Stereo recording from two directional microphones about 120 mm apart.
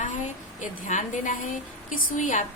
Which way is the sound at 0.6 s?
90° left.